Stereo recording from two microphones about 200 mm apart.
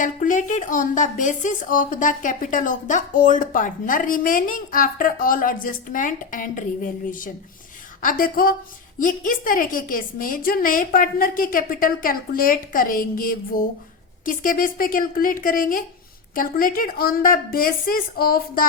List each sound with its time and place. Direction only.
0.0 s a woman's voice: 40° left (ahead or behind)